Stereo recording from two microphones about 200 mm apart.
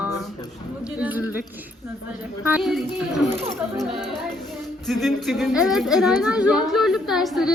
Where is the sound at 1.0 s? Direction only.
10° right (ahead or behind).